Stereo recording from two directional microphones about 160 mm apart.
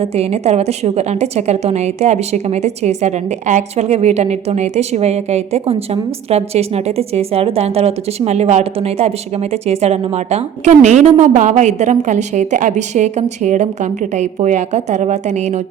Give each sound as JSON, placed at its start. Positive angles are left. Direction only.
{"t": 0.0, "sound": "a woman's voice", "side_deg": -40}